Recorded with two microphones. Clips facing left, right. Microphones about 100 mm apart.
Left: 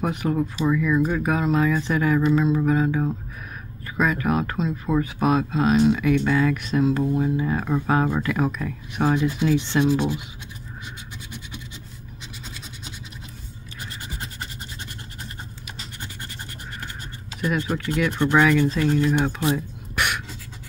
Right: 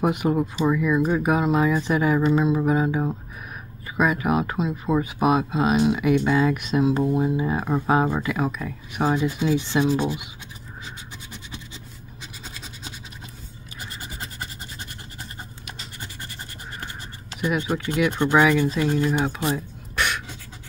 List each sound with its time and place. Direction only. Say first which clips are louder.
0.0 s speech: right 2 dB; 15° right (ahead or behind)
17.4 s speech: even; 10° right (ahead or behind)
19.4 s a sound: left 2 dB; 5° left (ahead or behind)